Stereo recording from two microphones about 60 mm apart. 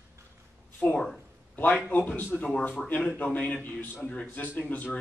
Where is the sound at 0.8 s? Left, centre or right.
Left.